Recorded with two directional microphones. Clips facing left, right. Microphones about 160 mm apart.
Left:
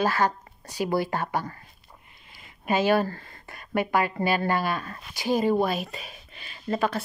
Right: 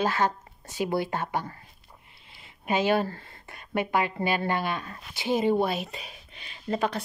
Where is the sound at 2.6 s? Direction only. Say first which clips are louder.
Left 2 dB; 20° right (ahead or behind).